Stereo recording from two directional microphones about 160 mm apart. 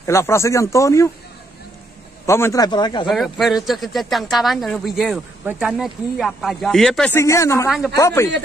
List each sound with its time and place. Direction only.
0.0 s speech: 15° left (ahead or behind)
2.2 s speech: 15° left (ahead or behind)
3.1 s speech: centre (ahead or behind)
7.2 s speech: 20° left (ahead or behind)